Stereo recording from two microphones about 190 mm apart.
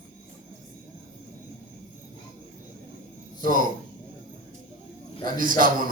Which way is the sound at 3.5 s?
45° right (ahead or behind).